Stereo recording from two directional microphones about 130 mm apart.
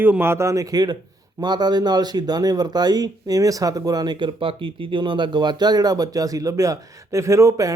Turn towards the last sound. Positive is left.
turn(degrees=-25)  # may be behind; listen again after turning